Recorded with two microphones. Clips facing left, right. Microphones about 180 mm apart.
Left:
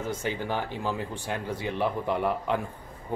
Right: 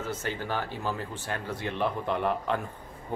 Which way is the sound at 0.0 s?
15° left (ahead or behind).